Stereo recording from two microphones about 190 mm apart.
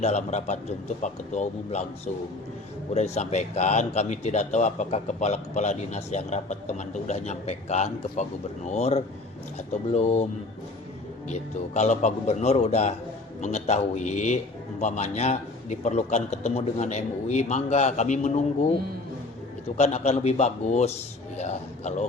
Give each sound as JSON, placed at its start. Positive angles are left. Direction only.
{"t": 0.0, "sound": "a man's voice", "side_deg": 40}
{"t": 2.9, "sound": "a man's voice", "side_deg": 35}
{"t": 11.3, "sound": "a man's voice", "side_deg": 35}
{"t": 19.7, "sound": "a man's voice", "side_deg": 35}